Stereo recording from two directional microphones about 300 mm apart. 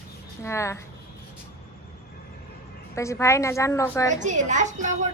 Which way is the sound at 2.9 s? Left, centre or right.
Centre.